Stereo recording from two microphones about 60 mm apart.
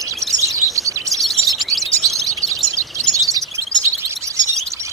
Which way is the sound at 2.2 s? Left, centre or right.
Right.